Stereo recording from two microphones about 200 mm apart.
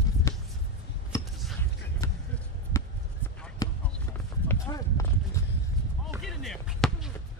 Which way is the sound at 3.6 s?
20° left (ahead or behind).